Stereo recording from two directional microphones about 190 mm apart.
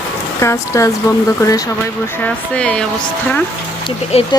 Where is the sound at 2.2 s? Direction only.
5° left (ahead or behind).